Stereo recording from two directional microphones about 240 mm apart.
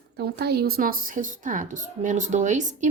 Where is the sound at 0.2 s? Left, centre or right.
Right.